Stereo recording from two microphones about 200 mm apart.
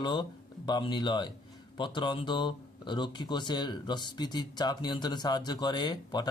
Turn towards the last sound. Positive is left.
turn(degrees=20)  # may be behind; listen again after turning